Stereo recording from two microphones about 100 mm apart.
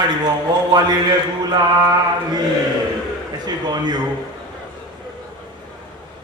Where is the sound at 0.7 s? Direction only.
40° right (ahead or behind).